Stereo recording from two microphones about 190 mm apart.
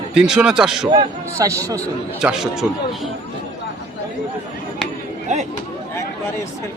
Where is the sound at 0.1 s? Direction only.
5° right (ahead or behind).